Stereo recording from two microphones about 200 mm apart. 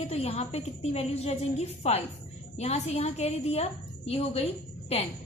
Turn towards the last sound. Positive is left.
turn(degrees=30)  # may be behind; listen again after turning